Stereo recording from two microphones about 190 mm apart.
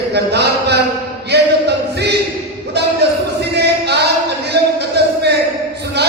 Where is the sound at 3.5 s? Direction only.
60° right (ahead or behind).